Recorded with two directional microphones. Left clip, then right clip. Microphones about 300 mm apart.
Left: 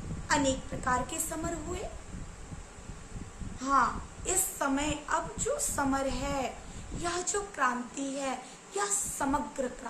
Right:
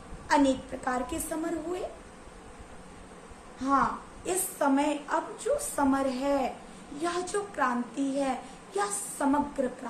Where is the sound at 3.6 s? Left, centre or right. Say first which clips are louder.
Right 1 dB; centre.